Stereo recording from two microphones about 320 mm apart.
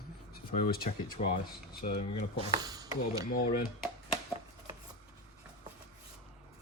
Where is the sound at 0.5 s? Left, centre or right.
Left.